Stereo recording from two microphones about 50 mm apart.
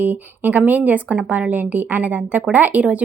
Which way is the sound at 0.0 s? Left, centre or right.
Right.